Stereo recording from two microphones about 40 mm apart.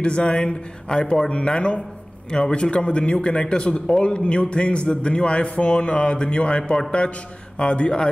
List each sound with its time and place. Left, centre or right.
0.0 s speech: left